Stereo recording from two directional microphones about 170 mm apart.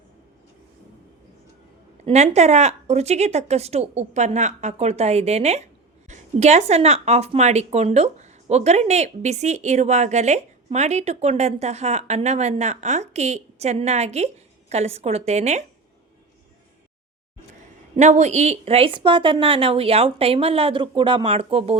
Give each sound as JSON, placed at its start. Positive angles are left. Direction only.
{"t": 2.0, "sound": "a woman's voice", "side_deg": -40}
{"t": 17.9, "sound": "a woman's voice", "side_deg": -40}